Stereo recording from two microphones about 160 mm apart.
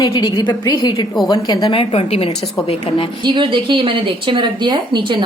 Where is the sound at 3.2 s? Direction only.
30° right (ahead or behind).